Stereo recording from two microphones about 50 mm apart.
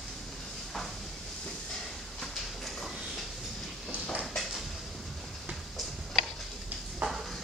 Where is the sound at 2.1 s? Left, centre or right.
Centre.